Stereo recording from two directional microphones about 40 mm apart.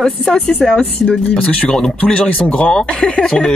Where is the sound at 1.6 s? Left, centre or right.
Centre.